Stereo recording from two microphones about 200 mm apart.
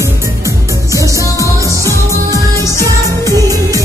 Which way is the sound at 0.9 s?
15° right (ahead or behind).